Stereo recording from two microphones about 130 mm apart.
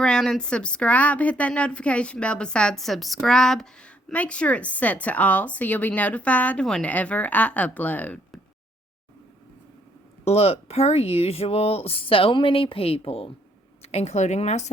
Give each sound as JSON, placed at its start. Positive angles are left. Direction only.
{"t": 0.0, "sound": "a woman's voice", "side_deg": 5}
{"t": 10.2, "sound": "speech", "side_deg": 55}